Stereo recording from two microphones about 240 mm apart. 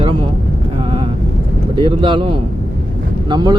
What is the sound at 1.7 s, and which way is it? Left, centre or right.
Speech, right.